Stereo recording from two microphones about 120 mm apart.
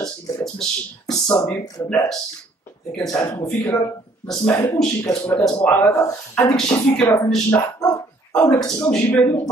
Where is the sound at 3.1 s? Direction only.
25° left (ahead or behind).